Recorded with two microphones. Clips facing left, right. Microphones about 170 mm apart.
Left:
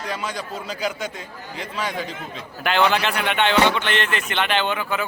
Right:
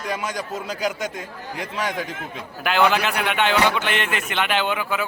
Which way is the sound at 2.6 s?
5° right (ahead or behind).